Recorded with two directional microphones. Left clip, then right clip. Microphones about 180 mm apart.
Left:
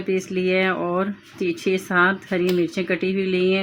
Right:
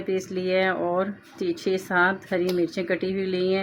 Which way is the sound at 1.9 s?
40° left (ahead or behind).